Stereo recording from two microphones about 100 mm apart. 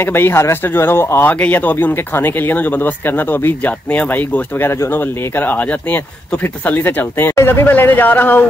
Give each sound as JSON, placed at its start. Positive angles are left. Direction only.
{"t": 0.0, "sound": "speech", "side_deg": 20}